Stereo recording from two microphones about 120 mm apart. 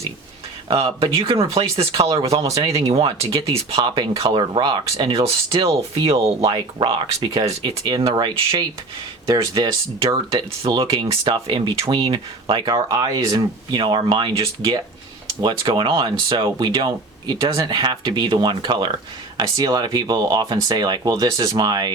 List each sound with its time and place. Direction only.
0.7 s speech: 45° right (ahead or behind)
2.0 s speech: 30° right (ahead or behind)
2.8 s speech: 55° right (ahead or behind)
3.2 s speech: 30° right (ahead or behind)
6.1 s speech: 55° right (ahead or behind)
6.4 s speech: 40° right (ahead or behind)
10.8 s speech: 45° right (ahead or behind)